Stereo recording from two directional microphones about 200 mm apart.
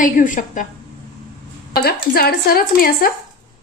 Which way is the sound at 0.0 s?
40° left (ahead or behind).